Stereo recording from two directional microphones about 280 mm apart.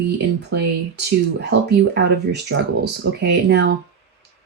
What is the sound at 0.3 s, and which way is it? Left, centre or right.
Speech, right.